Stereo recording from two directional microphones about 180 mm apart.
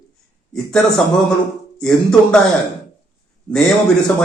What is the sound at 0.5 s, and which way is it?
A man's voice, 5° left (ahead or behind).